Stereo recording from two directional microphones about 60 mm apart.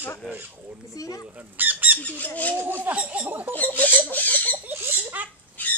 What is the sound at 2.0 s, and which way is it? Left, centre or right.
Speech, left.